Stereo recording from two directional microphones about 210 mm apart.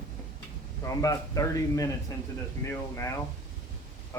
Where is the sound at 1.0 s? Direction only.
15° left (ahead or behind).